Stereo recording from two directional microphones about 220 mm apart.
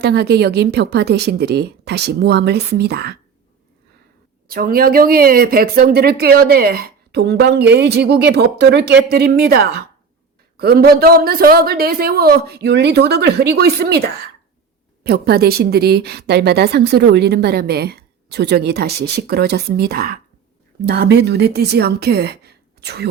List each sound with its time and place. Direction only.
0.0 s speech: 50° right (ahead or behind)
4.4 s speech: 40° right (ahead or behind)